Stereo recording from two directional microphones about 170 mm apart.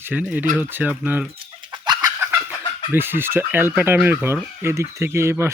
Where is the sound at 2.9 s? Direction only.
15° right (ahead or behind).